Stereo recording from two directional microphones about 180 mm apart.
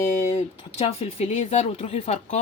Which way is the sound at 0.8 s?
35° left (ahead or behind).